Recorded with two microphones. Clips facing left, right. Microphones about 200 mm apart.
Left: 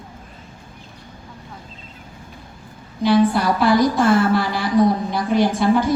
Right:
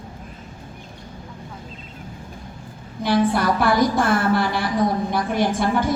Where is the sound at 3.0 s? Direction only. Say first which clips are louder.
Left 3 dB; 50° right (ahead or behind).